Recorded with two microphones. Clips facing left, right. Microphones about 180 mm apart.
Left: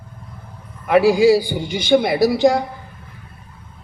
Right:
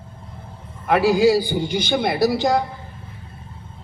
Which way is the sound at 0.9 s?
50° left (ahead or behind).